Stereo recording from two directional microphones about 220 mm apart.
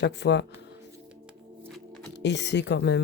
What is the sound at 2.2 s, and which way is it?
Speech, 50° left (ahead or behind).